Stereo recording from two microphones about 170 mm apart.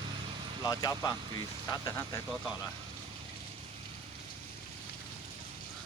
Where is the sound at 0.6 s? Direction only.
20° left (ahead or behind).